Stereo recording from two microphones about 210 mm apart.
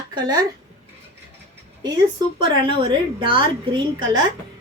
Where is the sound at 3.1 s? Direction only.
25° right (ahead or behind).